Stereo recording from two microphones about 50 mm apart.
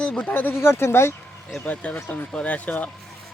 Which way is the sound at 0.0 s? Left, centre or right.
Left.